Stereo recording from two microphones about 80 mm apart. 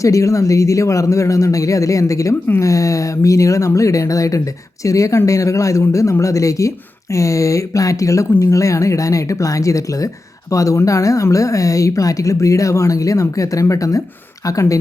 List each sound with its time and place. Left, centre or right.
0.0 s speech: left